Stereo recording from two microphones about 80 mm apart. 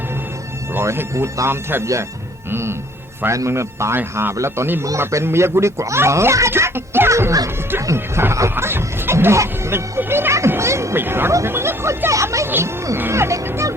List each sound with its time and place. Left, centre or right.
0.8 s speech: right
12.5 s speech: right